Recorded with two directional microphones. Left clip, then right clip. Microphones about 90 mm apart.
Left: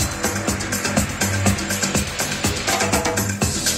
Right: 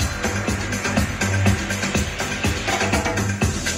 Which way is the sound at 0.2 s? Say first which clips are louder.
Even; 30° left (ahead or behind).